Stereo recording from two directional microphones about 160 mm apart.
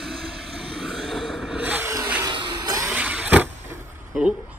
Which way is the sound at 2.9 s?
10° right (ahead or behind).